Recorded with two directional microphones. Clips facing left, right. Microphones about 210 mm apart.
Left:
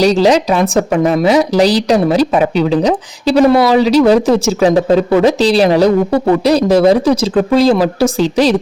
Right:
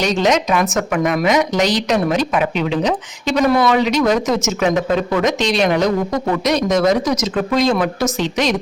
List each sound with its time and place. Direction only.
0.0 s speech: 35° left (ahead or behind)